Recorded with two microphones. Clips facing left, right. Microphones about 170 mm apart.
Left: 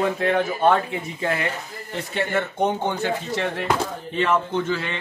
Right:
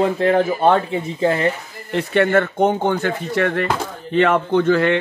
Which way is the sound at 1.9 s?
65° right (ahead or behind).